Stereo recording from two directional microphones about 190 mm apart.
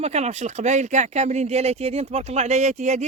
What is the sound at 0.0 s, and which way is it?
Speech, 35° right (ahead or behind).